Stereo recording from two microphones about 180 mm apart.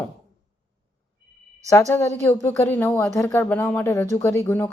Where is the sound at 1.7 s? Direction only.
15° left (ahead or behind).